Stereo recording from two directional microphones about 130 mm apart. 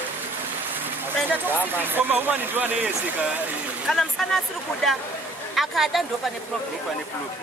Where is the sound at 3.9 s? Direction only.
Centre (ahead or behind).